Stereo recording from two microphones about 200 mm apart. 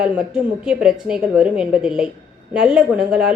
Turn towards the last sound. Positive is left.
turn(degrees=-5)  # may be behind; listen again after turning